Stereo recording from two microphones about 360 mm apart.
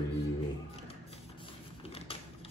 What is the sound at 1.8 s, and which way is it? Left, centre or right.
Mechanisms, centre.